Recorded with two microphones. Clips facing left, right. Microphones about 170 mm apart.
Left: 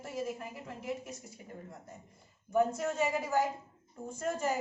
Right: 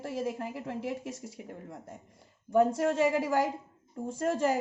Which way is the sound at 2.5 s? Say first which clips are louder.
Right 5 dB; 90° right.